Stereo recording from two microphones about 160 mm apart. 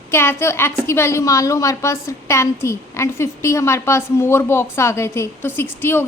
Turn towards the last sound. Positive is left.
turn(degrees=15)  # may be behind; listen again after turning